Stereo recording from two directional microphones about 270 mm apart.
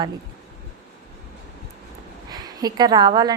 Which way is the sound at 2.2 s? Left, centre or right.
Centre.